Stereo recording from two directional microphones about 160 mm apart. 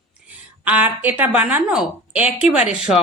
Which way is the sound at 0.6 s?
10° right (ahead or behind).